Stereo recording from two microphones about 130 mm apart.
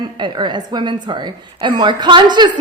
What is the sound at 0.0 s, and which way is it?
A woman's voice, 35° right (ahead or behind).